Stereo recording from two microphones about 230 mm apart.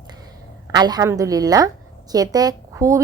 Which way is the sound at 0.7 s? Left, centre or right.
Centre.